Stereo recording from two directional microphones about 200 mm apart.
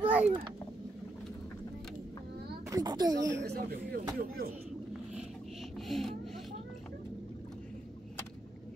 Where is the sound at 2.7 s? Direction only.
20° right (ahead or behind).